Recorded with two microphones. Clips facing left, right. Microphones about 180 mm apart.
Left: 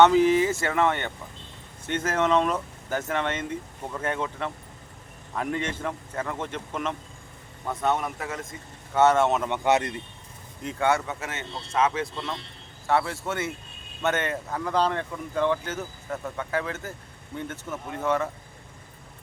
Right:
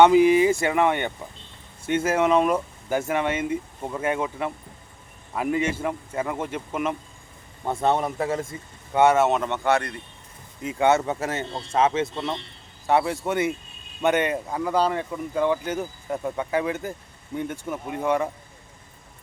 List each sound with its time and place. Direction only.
0.0 s speech: 15° right (ahead or behind)
7.6 s speech: 30° right (ahead or behind)
9.0 s speech: 10° right (ahead or behind)
9.5 s speech: 20° left (ahead or behind)
10.8 s speech: 20° right (ahead or behind)
11.0 s speech: 35° right (ahead or behind); by 18.3 s 15° right (ahead or behind)